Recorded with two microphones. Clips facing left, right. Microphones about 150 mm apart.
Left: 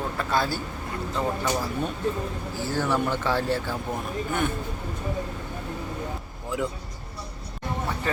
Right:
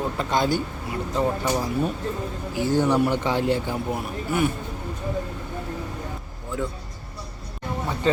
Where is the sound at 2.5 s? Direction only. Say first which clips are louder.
Right 6 dB; 15° right (ahead or behind).